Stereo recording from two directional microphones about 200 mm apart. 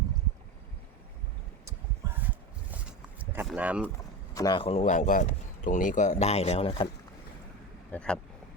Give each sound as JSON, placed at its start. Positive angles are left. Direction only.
{"t": 1.6, "sound": "a sound", "side_deg": -10}
{"t": 4.4, "sound": "speech", "side_deg": 20}
{"t": 7.9, "sound": "speech", "side_deg": 5}